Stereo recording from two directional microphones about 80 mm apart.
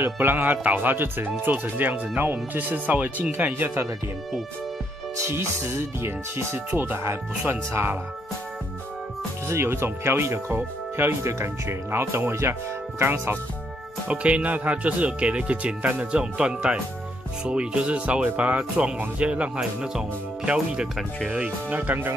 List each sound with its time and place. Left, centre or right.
0.0 s speech: right
5.9 s speech: right
9.5 s speech: right
14.0 s speech: centre